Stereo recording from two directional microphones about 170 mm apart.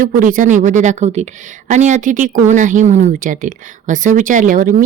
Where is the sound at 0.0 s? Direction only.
50° right (ahead or behind).